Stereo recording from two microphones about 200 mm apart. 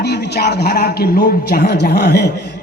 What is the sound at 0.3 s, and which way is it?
A man's voice, 55° left (ahead or behind).